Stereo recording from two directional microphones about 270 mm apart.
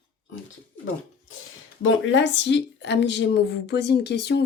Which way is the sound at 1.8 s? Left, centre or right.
Left.